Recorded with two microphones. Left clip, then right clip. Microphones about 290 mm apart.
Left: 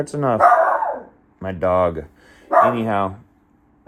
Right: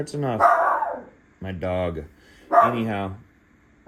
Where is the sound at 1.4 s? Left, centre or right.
Centre.